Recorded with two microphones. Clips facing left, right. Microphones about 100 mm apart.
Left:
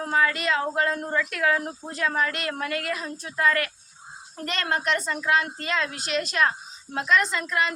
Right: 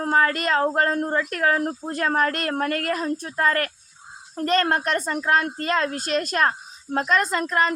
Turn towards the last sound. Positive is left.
turn(degrees=-40)  # may be behind; listen again after turning